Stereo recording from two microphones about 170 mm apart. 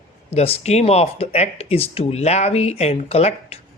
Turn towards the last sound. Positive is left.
turn(degrees=40)  # may be behind; listen again after turning